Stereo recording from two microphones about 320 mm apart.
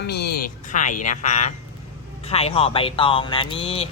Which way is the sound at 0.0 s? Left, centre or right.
Left.